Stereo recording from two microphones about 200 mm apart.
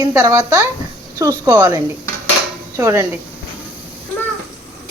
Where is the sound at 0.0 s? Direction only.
15° right (ahead or behind).